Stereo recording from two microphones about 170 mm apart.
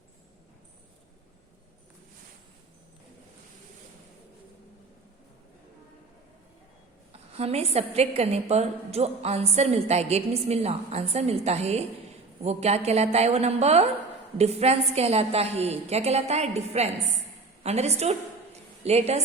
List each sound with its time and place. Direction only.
7.1 s a woman's voice: 35° right (ahead or behind)